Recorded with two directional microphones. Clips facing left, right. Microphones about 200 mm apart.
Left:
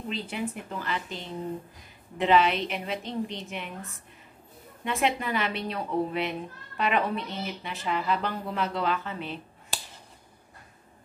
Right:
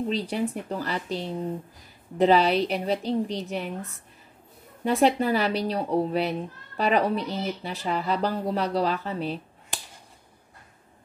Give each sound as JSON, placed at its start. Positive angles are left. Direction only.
{"t": 0.1, "sound": "speech", "side_deg": -35}
{"t": 4.8, "sound": "speech", "side_deg": -35}